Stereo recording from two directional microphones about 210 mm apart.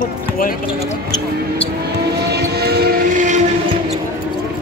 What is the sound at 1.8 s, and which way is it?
Train, 50° right (ahead or behind).